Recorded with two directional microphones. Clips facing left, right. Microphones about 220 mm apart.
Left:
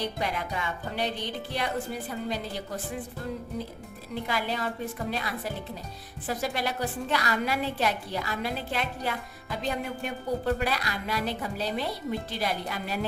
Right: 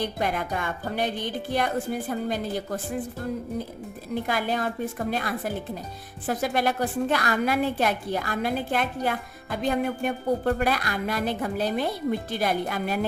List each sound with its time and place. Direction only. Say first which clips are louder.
0.2 s a woman's voice: right 4 dB; 50° right (ahead or behind)
4.1 s a woman's voice: right 4 dB; 50° right (ahead or behind)